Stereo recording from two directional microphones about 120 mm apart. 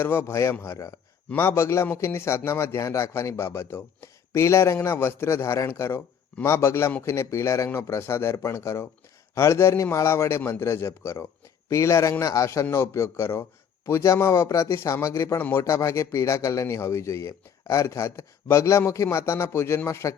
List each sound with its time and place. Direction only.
0.0 s a man's voice: 20° left (ahead or behind)